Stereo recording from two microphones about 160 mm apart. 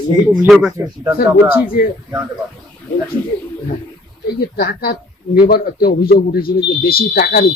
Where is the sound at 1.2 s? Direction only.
70° left (ahead or behind).